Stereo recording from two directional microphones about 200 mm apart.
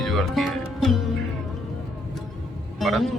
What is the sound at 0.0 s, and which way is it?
Music, centre (ahead or behind).